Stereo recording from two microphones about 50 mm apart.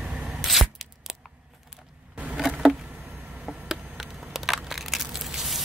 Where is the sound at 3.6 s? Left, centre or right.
Centre.